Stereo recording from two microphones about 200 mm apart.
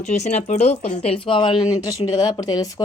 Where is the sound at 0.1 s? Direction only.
35° left (ahead or behind).